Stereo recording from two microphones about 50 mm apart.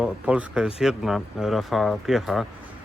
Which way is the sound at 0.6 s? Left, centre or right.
Centre.